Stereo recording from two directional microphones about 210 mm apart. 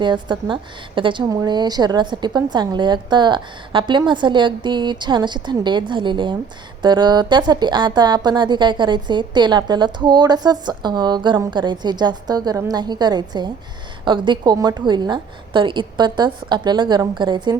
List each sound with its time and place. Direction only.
0.0 s a woman's voice: 20° right (ahead or behind)